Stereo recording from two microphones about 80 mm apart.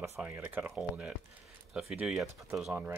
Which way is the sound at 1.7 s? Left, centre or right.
Centre.